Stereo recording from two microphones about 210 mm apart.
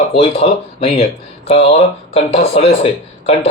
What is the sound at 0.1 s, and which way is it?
Speech, 30° left (ahead or behind).